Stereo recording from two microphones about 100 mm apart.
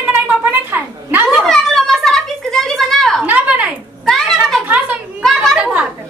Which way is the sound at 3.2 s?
15° right (ahead or behind).